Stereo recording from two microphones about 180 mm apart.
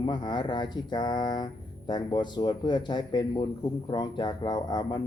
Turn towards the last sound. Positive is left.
turn(degrees=25)  # may be behind; listen again after turning